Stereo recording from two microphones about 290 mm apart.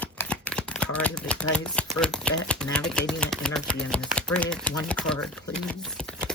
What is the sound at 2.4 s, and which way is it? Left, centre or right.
Speech, centre.